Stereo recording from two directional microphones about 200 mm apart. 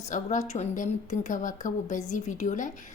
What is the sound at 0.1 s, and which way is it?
A woman's voice, 35° left (ahead or behind).